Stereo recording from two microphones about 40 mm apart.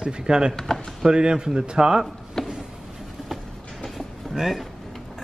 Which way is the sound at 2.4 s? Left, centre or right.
Centre.